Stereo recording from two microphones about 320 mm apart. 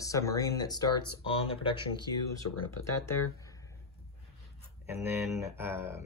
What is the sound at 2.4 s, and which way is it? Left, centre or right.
Speech, left.